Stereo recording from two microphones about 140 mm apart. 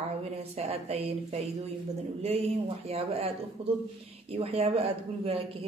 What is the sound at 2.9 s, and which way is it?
Speech, 45° right (ahead or behind).